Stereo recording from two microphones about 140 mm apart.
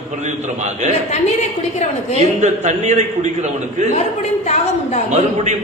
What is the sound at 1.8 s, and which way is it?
Speech, 55° left (ahead or behind).